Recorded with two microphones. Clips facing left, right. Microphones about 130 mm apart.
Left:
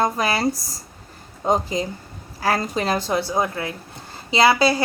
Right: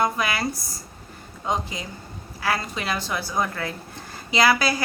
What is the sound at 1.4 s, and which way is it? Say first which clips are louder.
A woman's voice: left 7 dB; 40° left (ahead or behind).